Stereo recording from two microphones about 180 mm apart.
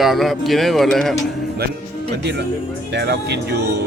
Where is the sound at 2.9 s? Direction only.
70° right (ahead or behind).